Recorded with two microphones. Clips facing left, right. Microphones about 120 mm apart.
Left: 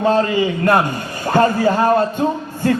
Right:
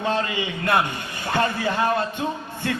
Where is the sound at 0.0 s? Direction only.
40° left (ahead or behind).